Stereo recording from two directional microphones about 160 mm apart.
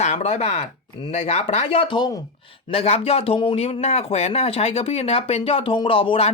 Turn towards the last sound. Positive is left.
turn(degrees=35)  # may be behind; listen again after turning